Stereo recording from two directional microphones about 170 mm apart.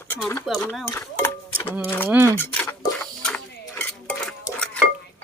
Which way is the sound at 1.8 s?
10° left (ahead or behind).